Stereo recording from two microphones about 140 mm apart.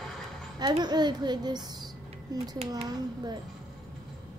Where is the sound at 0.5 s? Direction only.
30° right (ahead or behind).